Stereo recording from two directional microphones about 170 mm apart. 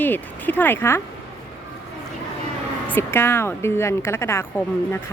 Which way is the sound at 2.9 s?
15° left (ahead or behind).